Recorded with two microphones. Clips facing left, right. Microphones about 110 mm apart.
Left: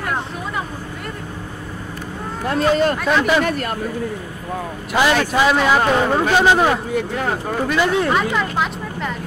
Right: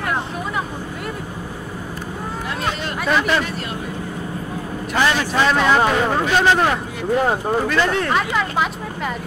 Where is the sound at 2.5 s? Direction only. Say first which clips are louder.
Left 11 dB; 45° left (ahead or behind).